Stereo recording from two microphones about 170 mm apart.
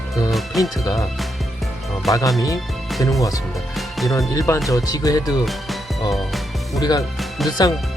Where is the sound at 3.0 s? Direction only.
20° left (ahead or behind).